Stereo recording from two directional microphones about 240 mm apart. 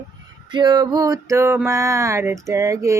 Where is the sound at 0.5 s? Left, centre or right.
Centre.